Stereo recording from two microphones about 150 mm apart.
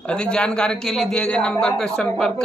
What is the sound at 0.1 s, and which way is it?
Speech, 5° left (ahead or behind).